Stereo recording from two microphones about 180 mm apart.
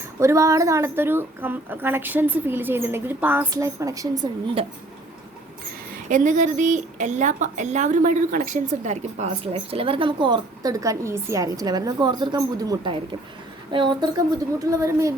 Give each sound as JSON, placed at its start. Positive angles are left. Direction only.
{"t": 0.2, "sound": "a woman's voice", "side_deg": -15}
{"t": 6.1, "sound": "a woman's voice", "side_deg": -45}